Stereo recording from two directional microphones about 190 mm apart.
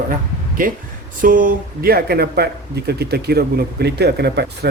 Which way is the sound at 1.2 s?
45° right (ahead or behind).